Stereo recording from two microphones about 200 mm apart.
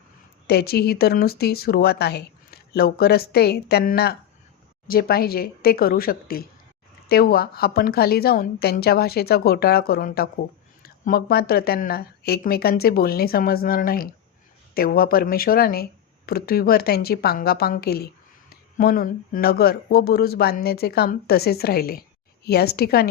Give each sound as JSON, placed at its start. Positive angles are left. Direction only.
{"t": 0.4, "sound": "speech", "side_deg": 50}